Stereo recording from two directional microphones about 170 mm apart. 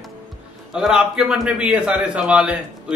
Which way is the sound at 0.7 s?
5° right (ahead or behind).